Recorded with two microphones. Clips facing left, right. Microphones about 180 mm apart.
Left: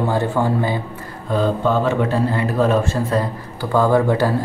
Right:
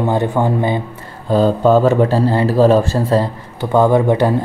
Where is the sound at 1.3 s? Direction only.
35° right (ahead or behind).